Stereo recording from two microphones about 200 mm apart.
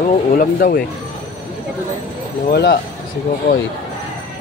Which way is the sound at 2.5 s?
50° left (ahead or behind).